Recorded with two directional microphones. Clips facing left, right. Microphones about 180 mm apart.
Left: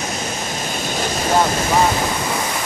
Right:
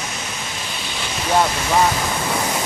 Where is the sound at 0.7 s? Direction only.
45° left (ahead or behind).